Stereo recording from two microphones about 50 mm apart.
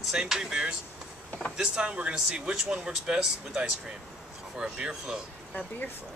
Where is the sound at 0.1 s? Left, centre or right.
Centre.